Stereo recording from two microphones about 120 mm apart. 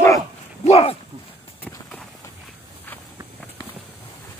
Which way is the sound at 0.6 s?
55° left (ahead or behind).